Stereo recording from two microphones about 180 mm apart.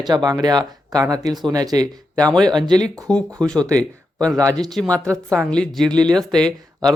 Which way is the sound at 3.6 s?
20° right (ahead or behind).